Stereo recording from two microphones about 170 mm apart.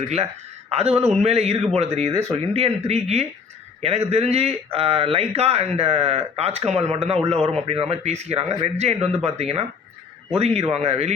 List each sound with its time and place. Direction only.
0.7 s a man's voice: 40° right (ahead or behind)